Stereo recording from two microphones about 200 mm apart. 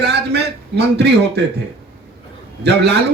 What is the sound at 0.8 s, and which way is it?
Speech, 55° right (ahead or behind).